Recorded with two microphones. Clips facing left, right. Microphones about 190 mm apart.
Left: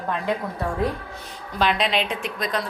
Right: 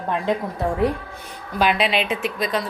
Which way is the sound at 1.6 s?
5° right (ahead or behind).